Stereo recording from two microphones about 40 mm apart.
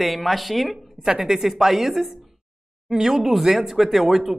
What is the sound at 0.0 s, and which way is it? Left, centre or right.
Speech, centre.